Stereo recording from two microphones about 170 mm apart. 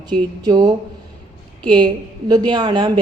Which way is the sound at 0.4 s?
25° right (ahead or behind).